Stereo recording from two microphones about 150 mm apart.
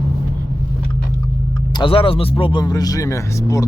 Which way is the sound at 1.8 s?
35° left (ahead or behind).